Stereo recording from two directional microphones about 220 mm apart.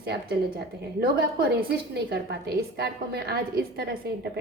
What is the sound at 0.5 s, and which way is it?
A woman's voice, 45° right (ahead or behind).